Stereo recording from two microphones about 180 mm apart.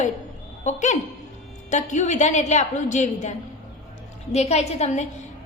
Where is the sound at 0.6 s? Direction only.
40° left (ahead or behind).